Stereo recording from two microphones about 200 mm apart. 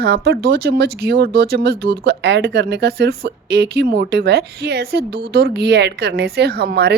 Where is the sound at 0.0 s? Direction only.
55° right (ahead or behind).